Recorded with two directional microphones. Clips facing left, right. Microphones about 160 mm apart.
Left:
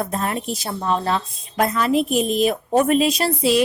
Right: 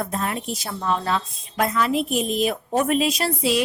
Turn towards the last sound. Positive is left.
turn(degrees=35)  # may be behind; listen again after turning